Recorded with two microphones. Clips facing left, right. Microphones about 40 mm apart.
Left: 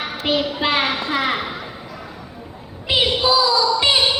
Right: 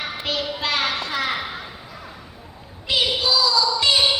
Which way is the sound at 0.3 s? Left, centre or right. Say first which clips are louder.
Left 6 dB; left.